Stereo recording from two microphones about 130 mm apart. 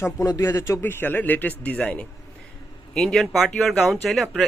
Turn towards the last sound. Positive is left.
turn(degrees=0)  # may be behind; listen again after turning